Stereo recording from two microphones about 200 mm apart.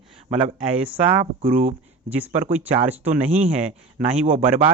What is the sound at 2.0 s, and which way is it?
Speech, 10° right (ahead or behind).